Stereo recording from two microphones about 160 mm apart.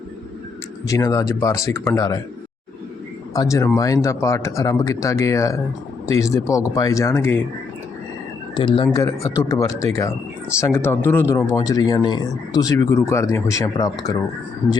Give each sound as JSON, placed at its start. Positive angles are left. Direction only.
{"t": 0.9, "sound": "speech", "side_deg": 20}
{"t": 3.3, "sound": "speech", "side_deg": 20}
{"t": 8.5, "sound": "speech", "side_deg": 30}
{"t": 9.0, "sound": "speech", "side_deg": 20}